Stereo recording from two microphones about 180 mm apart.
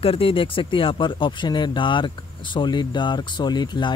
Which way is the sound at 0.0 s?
30° left (ahead or behind).